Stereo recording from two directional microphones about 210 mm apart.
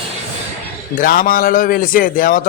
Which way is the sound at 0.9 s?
40° left (ahead or behind).